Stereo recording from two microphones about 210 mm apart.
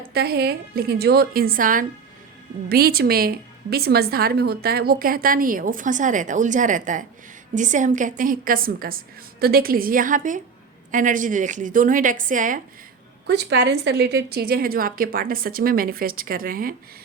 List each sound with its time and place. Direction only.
0.1 s a woman's voice: 50° right (ahead or behind)
13.2 s a woman's voice: 55° right (ahead or behind)